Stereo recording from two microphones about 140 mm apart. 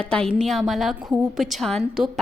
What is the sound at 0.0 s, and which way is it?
Speech, 5° left (ahead or behind).